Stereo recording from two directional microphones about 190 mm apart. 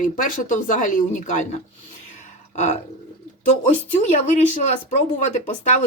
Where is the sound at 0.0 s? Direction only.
45° left (ahead or behind).